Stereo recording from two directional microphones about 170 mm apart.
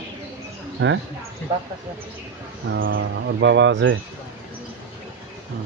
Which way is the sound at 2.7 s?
90° right.